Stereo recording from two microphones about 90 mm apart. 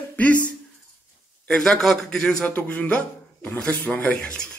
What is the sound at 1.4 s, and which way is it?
A man's voice, 5° left (ahead or behind).